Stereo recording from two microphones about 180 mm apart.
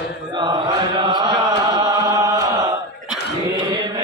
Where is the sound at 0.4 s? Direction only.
25° right (ahead or behind).